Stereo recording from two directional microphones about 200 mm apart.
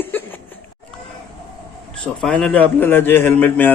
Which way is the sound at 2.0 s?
5° left (ahead or behind).